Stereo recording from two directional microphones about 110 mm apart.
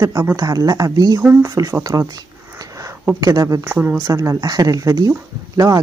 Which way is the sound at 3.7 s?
20° right (ahead or behind).